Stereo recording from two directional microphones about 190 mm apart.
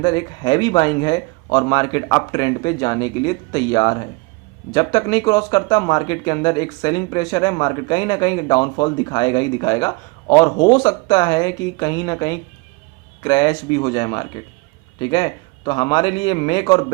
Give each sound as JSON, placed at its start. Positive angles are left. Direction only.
{"t": 0.0, "sound": "speech", "side_deg": 25}